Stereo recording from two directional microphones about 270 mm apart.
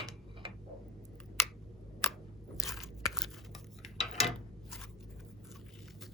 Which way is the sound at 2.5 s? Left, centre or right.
Centre.